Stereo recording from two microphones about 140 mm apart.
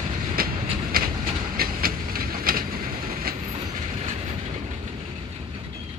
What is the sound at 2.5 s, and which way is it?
Vehicle, 90° right.